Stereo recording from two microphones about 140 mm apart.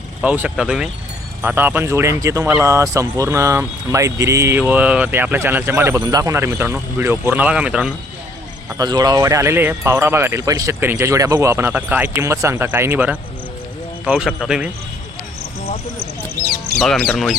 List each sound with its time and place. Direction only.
0.2 s speech: 10° right (ahead or behind)
8.8 s speech: 25° right (ahead or behind); by 14.7 s 5° right (ahead or behind)
16.8 s speech: 5° left (ahead or behind)